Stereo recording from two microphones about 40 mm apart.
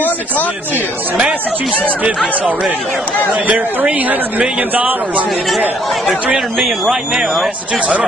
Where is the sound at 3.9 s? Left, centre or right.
Right.